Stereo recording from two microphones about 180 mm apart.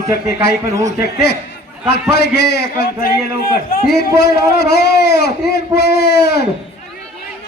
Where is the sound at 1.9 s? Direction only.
65° left (ahead or behind).